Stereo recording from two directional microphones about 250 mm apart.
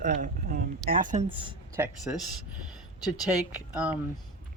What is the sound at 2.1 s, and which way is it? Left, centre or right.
Speech, centre.